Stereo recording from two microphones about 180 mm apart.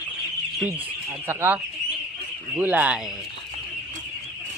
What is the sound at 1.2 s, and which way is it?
Speech, 10° right (ahead or behind).